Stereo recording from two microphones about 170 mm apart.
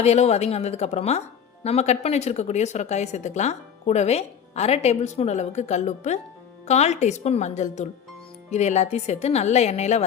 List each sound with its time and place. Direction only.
0.0 s a woman's voice: 40° left (ahead or behind)